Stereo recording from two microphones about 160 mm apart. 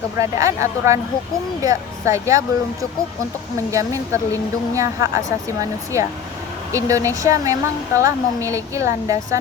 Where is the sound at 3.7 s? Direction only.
20° right (ahead or behind).